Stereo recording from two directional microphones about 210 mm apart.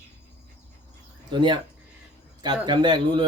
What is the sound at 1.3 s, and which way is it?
Speech, 20° right (ahead or behind).